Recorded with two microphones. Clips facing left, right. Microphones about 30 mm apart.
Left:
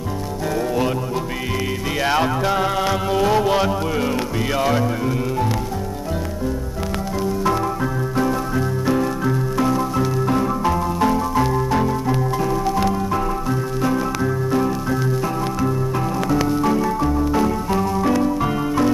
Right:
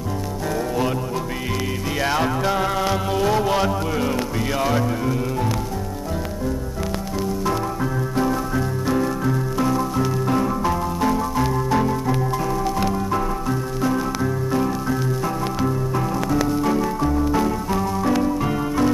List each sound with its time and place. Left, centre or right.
2.0 s music: centre
4.6 s speech: centre
8.2 s music: centre
16.4 s music: centre